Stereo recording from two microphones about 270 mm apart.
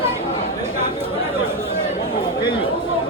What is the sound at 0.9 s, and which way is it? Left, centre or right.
Chatter, centre.